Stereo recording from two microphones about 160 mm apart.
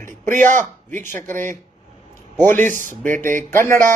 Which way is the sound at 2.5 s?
15° left (ahead or behind).